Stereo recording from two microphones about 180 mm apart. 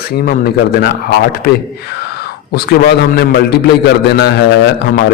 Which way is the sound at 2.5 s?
60° left (ahead or behind).